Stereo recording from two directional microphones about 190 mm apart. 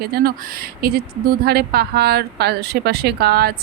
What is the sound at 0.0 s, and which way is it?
A woman's voice, 55° right (ahead or behind).